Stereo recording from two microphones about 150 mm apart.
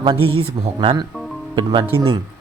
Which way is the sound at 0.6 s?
40° right (ahead or behind).